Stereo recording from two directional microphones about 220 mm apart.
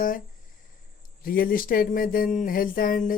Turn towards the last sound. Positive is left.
turn(degrees=40)  # may be behind; listen again after turning